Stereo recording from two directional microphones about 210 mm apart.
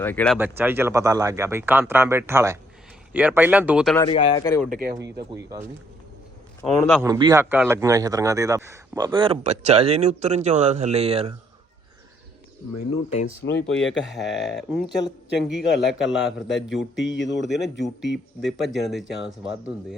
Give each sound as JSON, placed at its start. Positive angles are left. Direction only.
{"t": 0.0, "sound": "speech", "side_deg": 10}
{"t": 0.3, "sound": "speech", "side_deg": -10}
{"t": 4.0, "sound": "speech", "side_deg": 25}
{"t": 4.4, "sound": "speech", "side_deg": 10}
{"t": 4.7, "sound": "speech", "side_deg": -45}
{"t": 6.6, "sound": "speech", "side_deg": 0}
{"t": 7.0, "sound": "a man's voice", "side_deg": -15}
{"t": 13.4, "sound": "speech", "side_deg": 65}
{"t": 14.1, "sound": "speech", "side_deg": 0}
{"t": 17.0, "sound": "speech", "side_deg": 60}
{"t": 17.4, "sound": "speech", "side_deg": 0}